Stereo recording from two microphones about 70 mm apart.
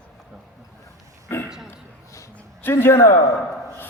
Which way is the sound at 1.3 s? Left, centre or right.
Left.